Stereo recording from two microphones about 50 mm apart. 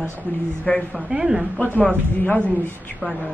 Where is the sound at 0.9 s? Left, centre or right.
Right.